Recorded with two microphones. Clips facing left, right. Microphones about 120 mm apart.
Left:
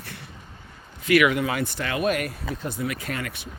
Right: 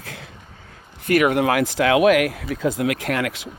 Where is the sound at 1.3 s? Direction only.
70° right (ahead or behind).